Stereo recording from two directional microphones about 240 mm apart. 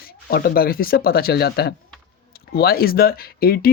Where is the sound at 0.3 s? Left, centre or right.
Left.